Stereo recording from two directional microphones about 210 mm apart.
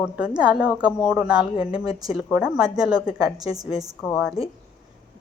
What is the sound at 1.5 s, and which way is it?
Speech, 25° left (ahead or behind).